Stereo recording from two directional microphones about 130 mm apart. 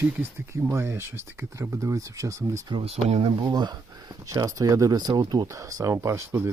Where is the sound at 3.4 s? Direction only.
30° right (ahead or behind).